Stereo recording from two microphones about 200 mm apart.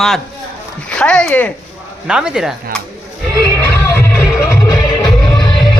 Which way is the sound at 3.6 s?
10° left (ahead or behind).